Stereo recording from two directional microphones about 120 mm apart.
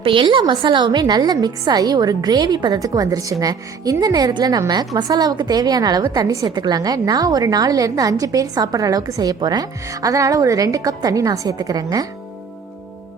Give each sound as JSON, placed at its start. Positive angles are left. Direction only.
{"t": 0.0, "sound": "a woman's voice", "side_deg": -45}